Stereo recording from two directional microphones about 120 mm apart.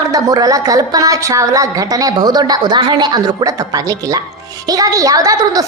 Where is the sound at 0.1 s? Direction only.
30° right (ahead or behind).